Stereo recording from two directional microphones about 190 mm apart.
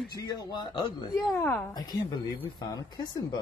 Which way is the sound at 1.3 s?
10° left (ahead or behind).